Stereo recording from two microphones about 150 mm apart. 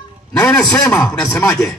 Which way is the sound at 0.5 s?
5° left (ahead or behind).